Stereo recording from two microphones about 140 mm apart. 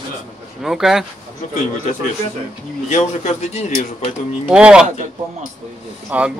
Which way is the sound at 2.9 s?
50° left (ahead or behind).